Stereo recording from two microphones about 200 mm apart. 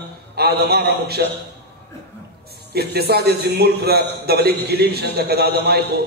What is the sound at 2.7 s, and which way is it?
A man's voice, 55° right (ahead or behind).